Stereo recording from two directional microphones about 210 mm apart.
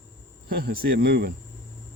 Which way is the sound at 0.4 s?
45° right (ahead or behind).